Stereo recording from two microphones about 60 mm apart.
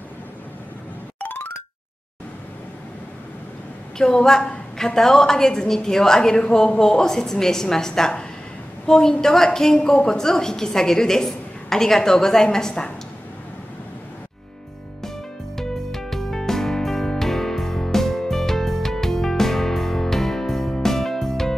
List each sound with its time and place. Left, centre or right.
1.2 s a sound: left
4.0 s a woman's voice: centre
4.4 s a woman's voice: centre
15.5 s music: centre